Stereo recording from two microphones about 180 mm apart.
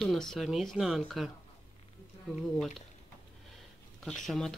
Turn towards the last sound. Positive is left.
turn(degrees=0)  # may be behind; listen again after turning